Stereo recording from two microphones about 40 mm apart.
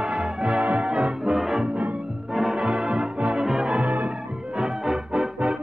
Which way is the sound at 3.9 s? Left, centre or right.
Right.